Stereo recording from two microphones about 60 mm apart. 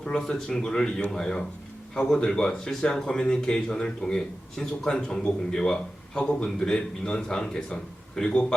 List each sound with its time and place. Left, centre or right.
0.0 s speech: centre